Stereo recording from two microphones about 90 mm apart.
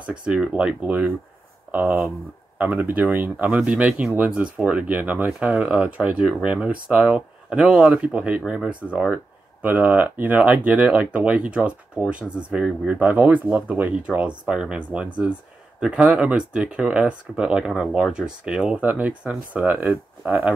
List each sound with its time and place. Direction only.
0.0 s speech: 10° right (ahead or behind)
2.6 s speech: 15° right (ahead or behind)
19.9 s speech: 10° right (ahead or behind)